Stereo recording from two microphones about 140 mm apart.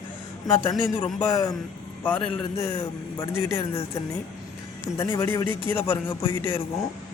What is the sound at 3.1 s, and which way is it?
Speech, 40° left (ahead or behind).